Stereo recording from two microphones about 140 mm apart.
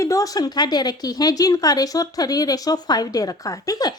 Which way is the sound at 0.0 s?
25° left (ahead or behind).